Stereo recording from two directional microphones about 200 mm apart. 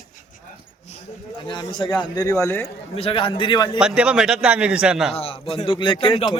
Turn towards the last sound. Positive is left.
turn(degrees=25)  # may be behind; listen again after turning